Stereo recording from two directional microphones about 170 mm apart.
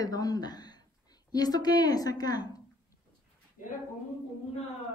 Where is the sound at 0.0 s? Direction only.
20° left (ahead or behind).